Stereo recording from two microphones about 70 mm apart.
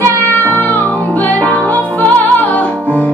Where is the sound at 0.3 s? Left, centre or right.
Left.